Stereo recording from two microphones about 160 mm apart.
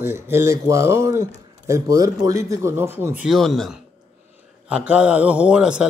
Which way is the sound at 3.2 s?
Centre (ahead or behind).